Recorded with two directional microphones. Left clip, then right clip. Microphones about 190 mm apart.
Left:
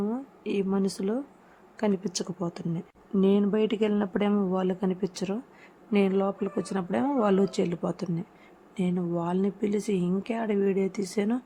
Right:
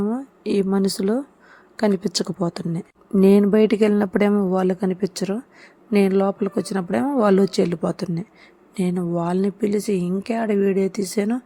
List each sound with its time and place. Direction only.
0.0 s speech: 30° right (ahead or behind)